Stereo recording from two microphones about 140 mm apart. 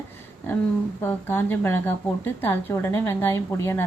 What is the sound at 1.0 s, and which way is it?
A woman's voice, 15° left (ahead or behind).